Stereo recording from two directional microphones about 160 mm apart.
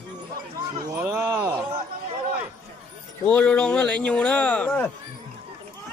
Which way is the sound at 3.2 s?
5° left (ahead or behind).